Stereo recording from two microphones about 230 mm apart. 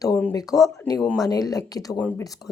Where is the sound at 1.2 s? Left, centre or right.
Centre.